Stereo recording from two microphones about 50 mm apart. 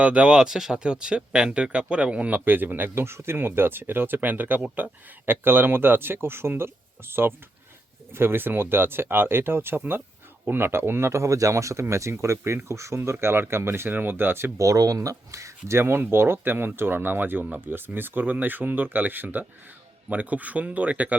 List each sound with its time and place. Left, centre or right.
0.0 s speech: right
2.4 s speech: right
11.1 s speech: right
13.1 s speech: right
13.9 s speech: right
14.6 s speech: right
15.8 s speech: right
17.7 s speech: right